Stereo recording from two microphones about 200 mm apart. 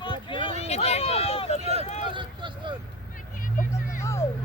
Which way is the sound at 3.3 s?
40° left (ahead or behind).